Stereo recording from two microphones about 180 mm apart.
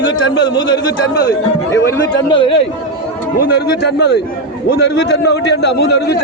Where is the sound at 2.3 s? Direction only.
30° left (ahead or behind).